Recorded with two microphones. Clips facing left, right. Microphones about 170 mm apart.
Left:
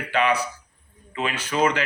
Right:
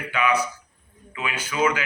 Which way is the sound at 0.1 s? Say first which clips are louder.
Left 1 dB; 35° left (ahead or behind).